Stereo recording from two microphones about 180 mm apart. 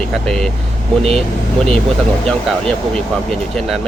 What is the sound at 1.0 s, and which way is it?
Speech, 35° right (ahead or behind).